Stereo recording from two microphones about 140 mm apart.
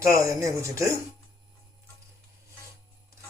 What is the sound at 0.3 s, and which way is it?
Speech, 25° right (ahead or behind).